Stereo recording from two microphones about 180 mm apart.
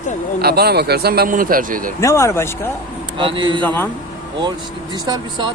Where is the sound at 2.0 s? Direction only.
15° left (ahead or behind).